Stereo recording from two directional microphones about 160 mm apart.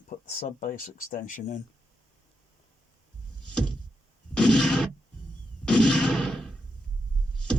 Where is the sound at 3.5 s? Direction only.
5° left (ahead or behind).